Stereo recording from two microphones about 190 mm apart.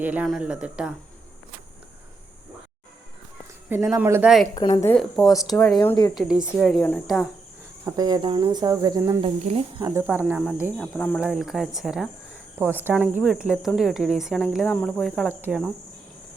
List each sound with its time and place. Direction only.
0.0 s speech: 5° right (ahead or behind)
3.7 s speech: 10° right (ahead or behind)
5.3 s speech: 15° left (ahead or behind)
6.1 s speech: 5° right (ahead or behind)
7.9 s cricket: 20° right (ahead or behind)
9.2 s speech: 30° right (ahead or behind)
9.8 s speech: 15° right (ahead or behind)
10.9 s speech: 10° left (ahead or behind)
11.2 s speech: 5° right (ahead or behind)
15.4 s speech: 10° right (ahead or behind)